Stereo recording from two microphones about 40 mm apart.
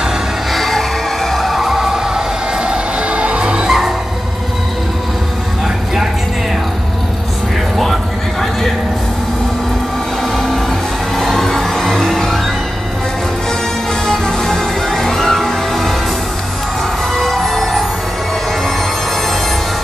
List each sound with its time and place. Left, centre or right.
0.5 s music: centre
2.7 s music: right
7.7 s a sound: centre
11.1 s music: centre
14.0 s music: centre
17.1 s music: centre